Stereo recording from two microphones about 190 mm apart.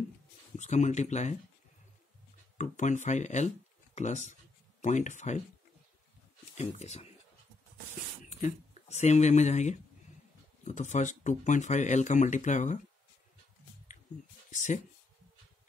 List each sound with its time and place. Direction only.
0.6 s speech: 40° left (ahead or behind)
2.5 s speech: 40° left (ahead or behind)
6.5 s speech: 35° left (ahead or behind)
8.2 s speech: 40° left (ahead or behind)
14.5 s speech: 40° left (ahead or behind)